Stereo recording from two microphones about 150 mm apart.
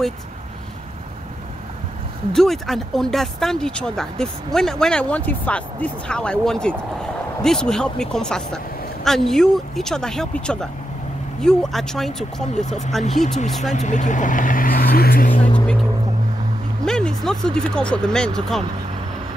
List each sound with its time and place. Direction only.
2.3 s speech: centre (ahead or behind)
12.6 s speech: 50° left (ahead or behind)
13.2 s speech: 5° left (ahead or behind)
13.7 s speech: 55° left (ahead or behind); by 15.4 s 70° left (ahead or behind)
16.8 s speech: 5° left (ahead or behind)